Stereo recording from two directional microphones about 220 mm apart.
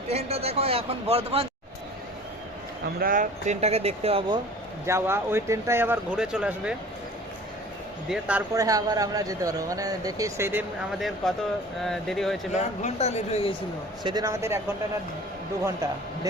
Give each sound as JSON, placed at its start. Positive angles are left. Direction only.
{"t": 0.1, "sound": "a man's voice", "side_deg": -30}
{"t": 3.0, "sound": "a man's voice", "side_deg": -40}
{"t": 4.9, "sound": "a man's voice", "side_deg": -10}
{"t": 8.1, "sound": "a man's voice", "side_deg": -5}
{"t": 11.2, "sound": "speech", "side_deg": 0}
{"t": 12.8, "sound": "speech", "side_deg": 30}
{"t": 14.0, "sound": "a man's voice", "side_deg": -20}
{"t": 15.6, "sound": "a man's voice", "side_deg": -15}